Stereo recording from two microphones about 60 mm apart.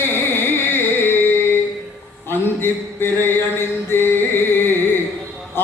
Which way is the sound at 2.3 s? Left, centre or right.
Left.